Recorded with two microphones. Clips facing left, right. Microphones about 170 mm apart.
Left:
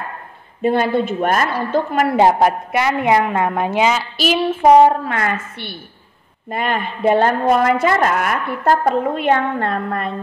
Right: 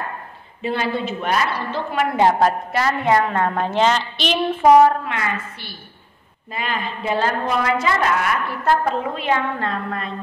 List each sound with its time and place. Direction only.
0.6 s a woman's voice: 50° left (ahead or behind)
2.1 s a woman's voice: 20° left (ahead or behind)
4.6 s speech: 25° left (ahead or behind)
5.0 s a woman's voice: 50° left (ahead or behind)